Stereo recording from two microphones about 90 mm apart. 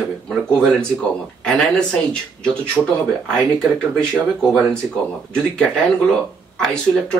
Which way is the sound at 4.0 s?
5° left (ahead or behind).